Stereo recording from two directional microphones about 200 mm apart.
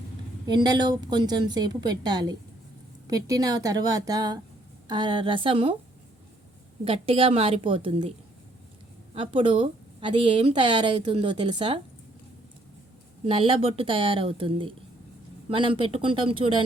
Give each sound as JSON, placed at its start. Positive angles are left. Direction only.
{"t": 0.4, "sound": "a woman's voice", "side_deg": -20}
{"t": 6.8, "sound": "a woman's voice", "side_deg": -30}
{"t": 9.1, "sound": "a woman's voice", "side_deg": -25}
{"t": 13.2, "sound": "a woman's voice", "side_deg": -25}